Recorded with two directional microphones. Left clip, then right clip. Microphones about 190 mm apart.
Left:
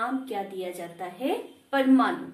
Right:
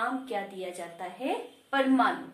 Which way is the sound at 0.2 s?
15° right (ahead or behind).